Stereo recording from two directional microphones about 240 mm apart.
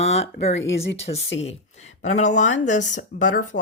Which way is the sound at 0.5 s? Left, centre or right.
Left.